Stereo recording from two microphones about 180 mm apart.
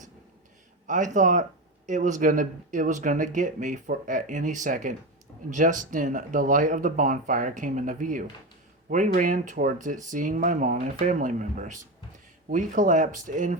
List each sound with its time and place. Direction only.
0.9 s speech: 45° right (ahead or behind)